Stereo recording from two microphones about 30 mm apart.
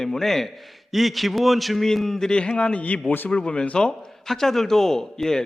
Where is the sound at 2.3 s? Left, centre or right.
Left.